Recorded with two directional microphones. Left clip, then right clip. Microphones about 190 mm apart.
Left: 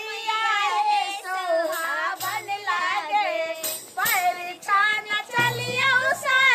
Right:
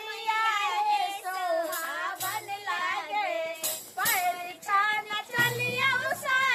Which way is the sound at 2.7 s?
20° left (ahead or behind).